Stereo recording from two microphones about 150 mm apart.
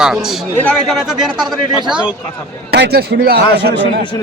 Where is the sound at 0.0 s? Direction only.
5° right (ahead or behind).